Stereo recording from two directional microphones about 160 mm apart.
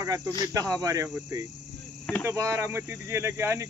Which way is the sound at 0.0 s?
20° right (ahead or behind).